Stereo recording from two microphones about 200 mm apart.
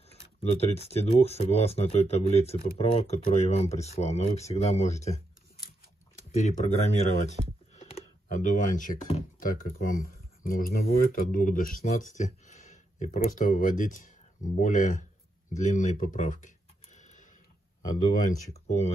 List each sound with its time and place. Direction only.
0.1 s speech: 30° left (ahead or behind)
15.5 s a sound: 40° left (ahead or behind)
17.8 s speech: 40° left (ahead or behind)